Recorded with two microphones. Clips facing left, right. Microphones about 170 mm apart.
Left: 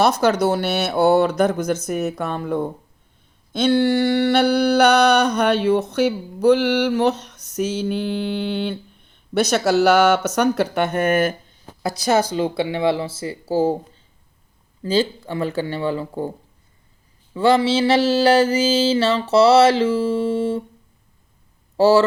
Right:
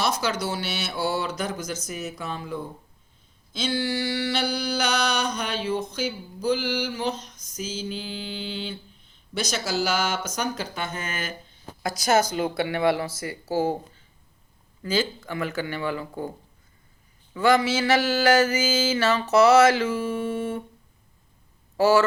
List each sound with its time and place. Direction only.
0.0 s a sound: 60° left (ahead or behind)
11.8 s speech: 35° left (ahead or behind)
14.8 s mantra: 30° left (ahead or behind)
17.3 s mantra: 30° left (ahead or behind)
21.8 s speech: 35° left (ahead or behind)